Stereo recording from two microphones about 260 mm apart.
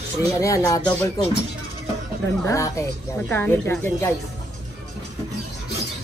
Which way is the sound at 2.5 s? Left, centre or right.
Centre.